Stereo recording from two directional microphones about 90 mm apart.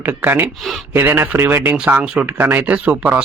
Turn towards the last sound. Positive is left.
turn(degrees=-15)  # may be behind; listen again after turning